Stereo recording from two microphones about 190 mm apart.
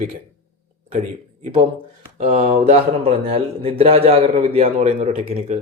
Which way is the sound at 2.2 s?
35° right (ahead or behind).